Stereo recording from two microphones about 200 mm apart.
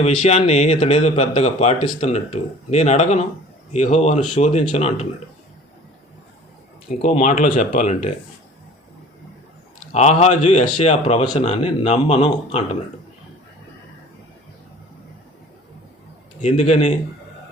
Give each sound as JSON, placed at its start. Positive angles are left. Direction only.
{"t": 0.0, "sound": "speech", "side_deg": 35}
{"t": 7.0, "sound": "speech", "side_deg": 35}
{"t": 9.9, "sound": "speech", "side_deg": 35}
{"t": 16.4, "sound": "speech", "side_deg": 35}